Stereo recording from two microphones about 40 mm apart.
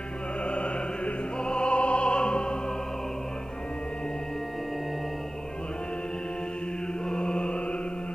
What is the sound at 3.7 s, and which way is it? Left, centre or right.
Music, left.